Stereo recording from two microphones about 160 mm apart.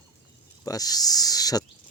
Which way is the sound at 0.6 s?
25° left (ahead or behind).